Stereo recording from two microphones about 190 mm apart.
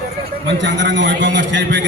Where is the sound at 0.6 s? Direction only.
70° right (ahead or behind).